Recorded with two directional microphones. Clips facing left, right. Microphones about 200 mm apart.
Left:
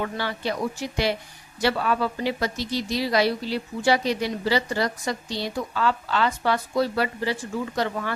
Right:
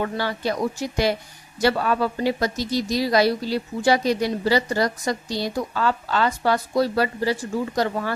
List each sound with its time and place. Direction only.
0.0 s speech: 40° right (ahead or behind)